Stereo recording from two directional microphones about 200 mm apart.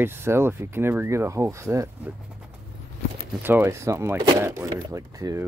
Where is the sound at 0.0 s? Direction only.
10° right (ahead or behind).